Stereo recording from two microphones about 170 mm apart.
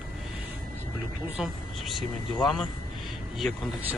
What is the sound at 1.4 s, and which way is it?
Speech, centre (ahead or behind).